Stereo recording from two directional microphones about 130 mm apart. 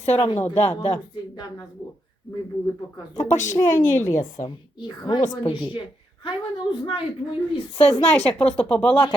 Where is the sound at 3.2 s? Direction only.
70° left (ahead or behind).